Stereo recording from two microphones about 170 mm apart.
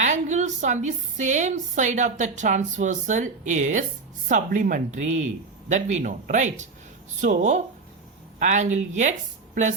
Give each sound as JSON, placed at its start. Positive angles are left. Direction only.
{"t": 0.0, "sound": "a woman's voice", "side_deg": -45}